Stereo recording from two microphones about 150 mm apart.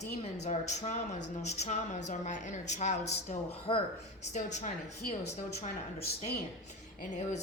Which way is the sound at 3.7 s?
35° left (ahead or behind).